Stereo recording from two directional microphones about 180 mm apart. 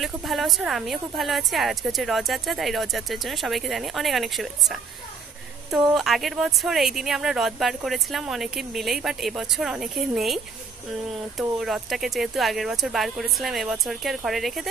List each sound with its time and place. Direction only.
0.0 s a woman's voice: centre (ahead or behind)